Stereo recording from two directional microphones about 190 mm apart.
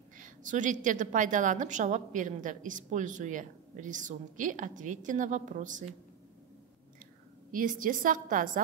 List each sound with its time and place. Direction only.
0.2 s a woman's voice: 40° right (ahead or behind)
7.5 s a woman's voice: 45° right (ahead or behind)